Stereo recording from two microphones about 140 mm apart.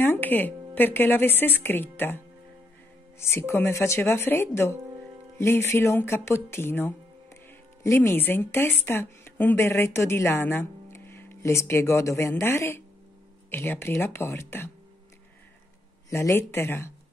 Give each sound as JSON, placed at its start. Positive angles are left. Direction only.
{"t": 0.0, "sound": "a woman's voice", "side_deg": 15}
{"t": 3.2, "sound": "a woman's voice", "side_deg": 15}
{"t": 16.1, "sound": "speech", "side_deg": 20}